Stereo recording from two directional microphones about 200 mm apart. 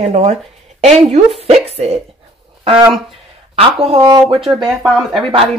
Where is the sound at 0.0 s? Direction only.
35° right (ahead or behind).